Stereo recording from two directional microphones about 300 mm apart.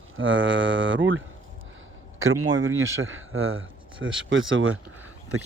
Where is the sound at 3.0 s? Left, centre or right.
Right.